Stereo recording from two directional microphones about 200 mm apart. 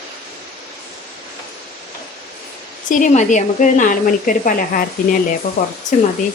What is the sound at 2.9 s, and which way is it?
A woman's voice, 35° left (ahead or behind).